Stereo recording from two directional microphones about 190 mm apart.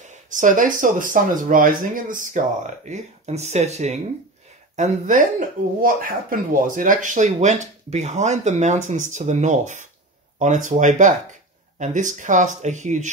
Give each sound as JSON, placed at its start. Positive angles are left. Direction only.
{"t": 0.1, "sound": "speech", "side_deg": -40}